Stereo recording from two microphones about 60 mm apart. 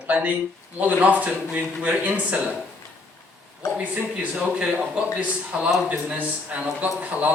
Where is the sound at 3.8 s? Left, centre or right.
Centre.